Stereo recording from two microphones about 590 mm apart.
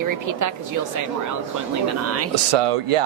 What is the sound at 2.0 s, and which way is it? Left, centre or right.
Speech, right.